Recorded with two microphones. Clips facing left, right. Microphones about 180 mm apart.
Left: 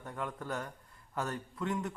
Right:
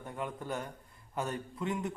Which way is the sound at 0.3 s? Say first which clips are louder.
Right 1 dB; 15° right (ahead or behind).